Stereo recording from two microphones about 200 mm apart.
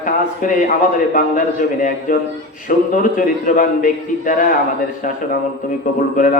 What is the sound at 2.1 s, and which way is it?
Speech, 45° left (ahead or behind).